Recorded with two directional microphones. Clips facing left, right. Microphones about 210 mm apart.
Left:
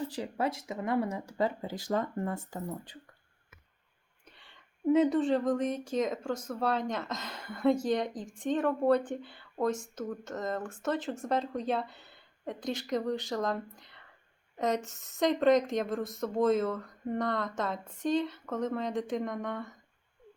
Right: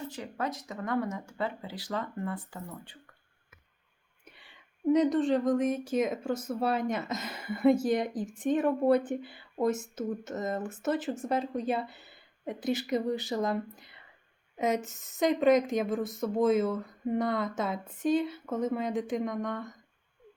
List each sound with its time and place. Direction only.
0.1 s speech: 30° left (ahead or behind)
4.3 s a sound: 10° right (ahead or behind)
4.9 s speech: 5° left (ahead or behind)